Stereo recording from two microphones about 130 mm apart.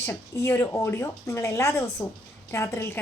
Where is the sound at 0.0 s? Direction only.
20° left (ahead or behind).